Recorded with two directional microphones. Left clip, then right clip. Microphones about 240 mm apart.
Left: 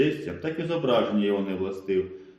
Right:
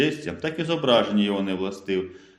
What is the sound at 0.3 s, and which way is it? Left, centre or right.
Speech, right.